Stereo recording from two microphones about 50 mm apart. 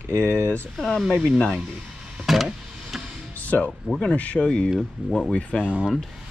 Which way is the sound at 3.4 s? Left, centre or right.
Left.